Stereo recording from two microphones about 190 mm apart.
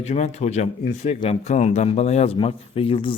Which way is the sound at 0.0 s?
35° left (ahead or behind).